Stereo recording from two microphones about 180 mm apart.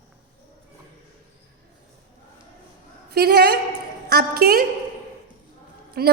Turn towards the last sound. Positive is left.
turn(degrees=-60)  # may be behind; listen again after turning